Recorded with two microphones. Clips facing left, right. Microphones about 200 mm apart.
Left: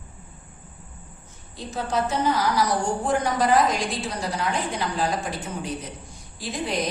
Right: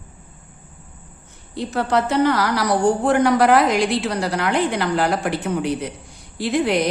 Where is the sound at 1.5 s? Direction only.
70° right (ahead or behind).